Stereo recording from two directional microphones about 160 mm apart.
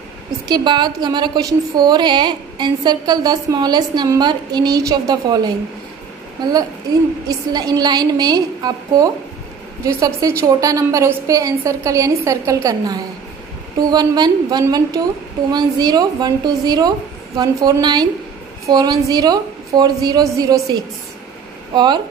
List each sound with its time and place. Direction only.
0.5 s a woman's voice: 25° right (ahead or behind)
7.2 s a woman's voice: 25° right (ahead or behind)